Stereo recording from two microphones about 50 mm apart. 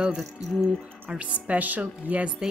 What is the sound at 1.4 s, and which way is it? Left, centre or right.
Speech, right.